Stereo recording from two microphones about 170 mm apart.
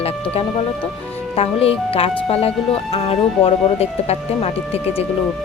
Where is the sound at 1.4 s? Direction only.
35° left (ahead or behind).